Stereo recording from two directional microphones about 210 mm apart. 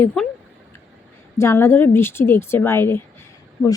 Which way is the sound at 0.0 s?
5° left (ahead or behind).